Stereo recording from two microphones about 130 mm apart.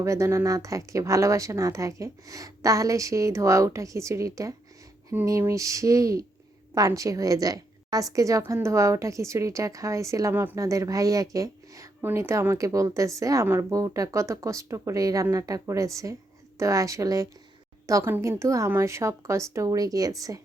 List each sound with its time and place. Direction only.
0.0 s a woman's voice: 20° right (ahead or behind)